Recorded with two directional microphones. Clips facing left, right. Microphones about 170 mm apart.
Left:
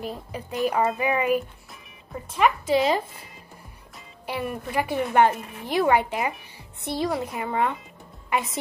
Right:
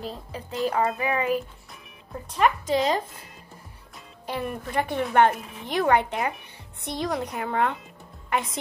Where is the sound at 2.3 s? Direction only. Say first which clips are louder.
Left 1 dB; 5° left (ahead or behind).